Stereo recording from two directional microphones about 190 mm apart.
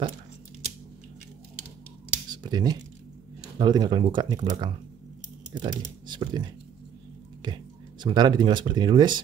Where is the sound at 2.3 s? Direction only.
20° right (ahead or behind).